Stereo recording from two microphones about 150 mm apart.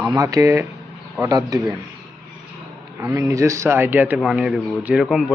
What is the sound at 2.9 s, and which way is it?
A man's voice, 20° right (ahead or behind).